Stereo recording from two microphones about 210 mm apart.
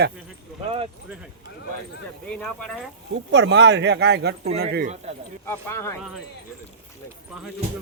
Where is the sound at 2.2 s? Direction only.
5° left (ahead or behind).